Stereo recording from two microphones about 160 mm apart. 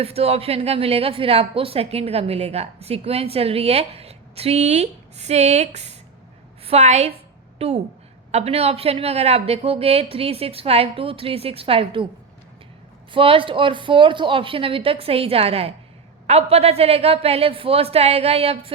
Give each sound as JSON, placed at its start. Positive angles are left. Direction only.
{"t": 0.0, "sound": "a woman's voice", "side_deg": -40}
{"t": 13.1, "sound": "a woman's voice", "side_deg": -35}